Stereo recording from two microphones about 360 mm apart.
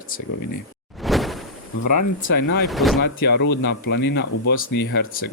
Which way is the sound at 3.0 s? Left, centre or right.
Left.